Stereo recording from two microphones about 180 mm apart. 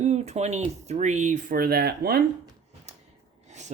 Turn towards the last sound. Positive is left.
turn(degrees=-40)  # may be behind; listen again after turning